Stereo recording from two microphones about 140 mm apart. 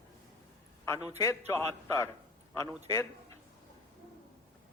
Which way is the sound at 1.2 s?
20° left (ahead or behind).